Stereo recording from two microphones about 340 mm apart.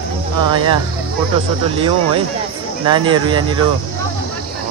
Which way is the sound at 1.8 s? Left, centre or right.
Centre.